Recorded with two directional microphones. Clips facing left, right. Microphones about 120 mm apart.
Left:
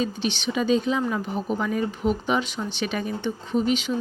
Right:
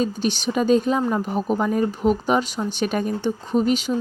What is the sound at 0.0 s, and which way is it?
A woman's voice, 40° right (ahead or behind).